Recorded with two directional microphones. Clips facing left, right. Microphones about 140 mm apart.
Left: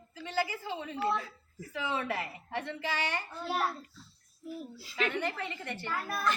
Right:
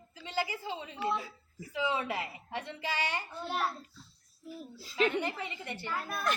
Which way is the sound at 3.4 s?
5° left (ahead or behind).